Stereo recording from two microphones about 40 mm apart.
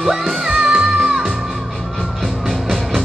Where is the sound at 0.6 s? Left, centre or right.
Centre.